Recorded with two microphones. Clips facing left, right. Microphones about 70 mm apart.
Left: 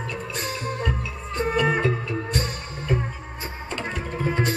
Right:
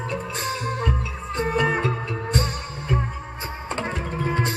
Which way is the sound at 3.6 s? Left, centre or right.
Right.